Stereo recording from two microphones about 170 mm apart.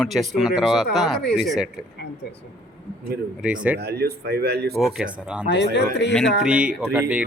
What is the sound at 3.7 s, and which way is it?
Speech, 70° right (ahead or behind).